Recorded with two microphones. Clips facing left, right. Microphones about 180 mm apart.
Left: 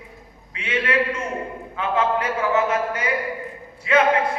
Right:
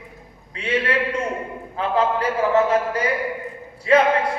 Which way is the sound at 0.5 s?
35° right (ahead or behind).